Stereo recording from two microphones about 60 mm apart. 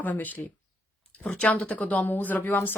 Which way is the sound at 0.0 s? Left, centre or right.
Left.